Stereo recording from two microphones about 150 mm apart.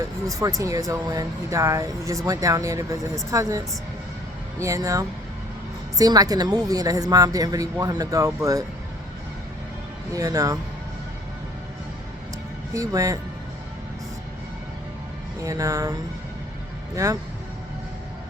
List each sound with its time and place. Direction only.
0.6 s a woman's voice: 20° right (ahead or behind)
4.6 s a woman's voice: 20° right (ahead or behind)
10.2 s a woman's voice: 25° right (ahead or behind)
12.7 s a woman's voice: 20° right (ahead or behind)
15.4 s a woman's voice: 20° right (ahead or behind)